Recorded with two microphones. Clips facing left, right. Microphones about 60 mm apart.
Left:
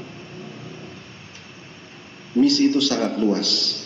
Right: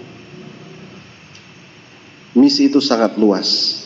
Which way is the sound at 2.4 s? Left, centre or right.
Right.